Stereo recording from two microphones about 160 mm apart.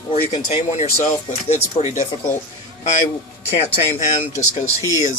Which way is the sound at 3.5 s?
40° left (ahead or behind).